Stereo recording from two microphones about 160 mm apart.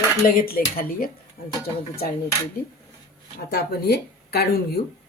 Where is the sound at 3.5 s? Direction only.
85° left.